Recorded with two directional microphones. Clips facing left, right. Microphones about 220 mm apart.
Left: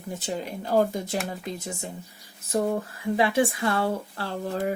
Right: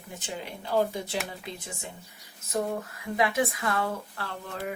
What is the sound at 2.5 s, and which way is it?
Speech, 30° left (ahead or behind).